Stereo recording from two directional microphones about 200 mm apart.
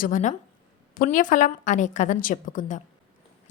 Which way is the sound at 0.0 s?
40° left (ahead or behind).